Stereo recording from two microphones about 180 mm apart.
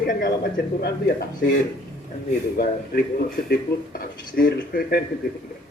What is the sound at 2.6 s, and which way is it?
Speech, 55° left (ahead or behind).